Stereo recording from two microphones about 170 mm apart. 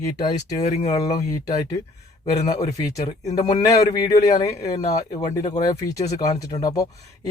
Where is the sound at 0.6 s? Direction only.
45° left (ahead or behind).